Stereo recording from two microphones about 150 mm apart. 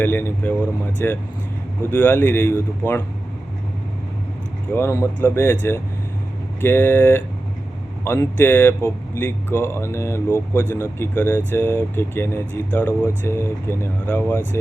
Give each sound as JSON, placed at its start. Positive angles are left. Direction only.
{"t": 0.0, "sound": "speech", "side_deg": 15}
{"t": 4.7, "sound": "speech", "side_deg": 15}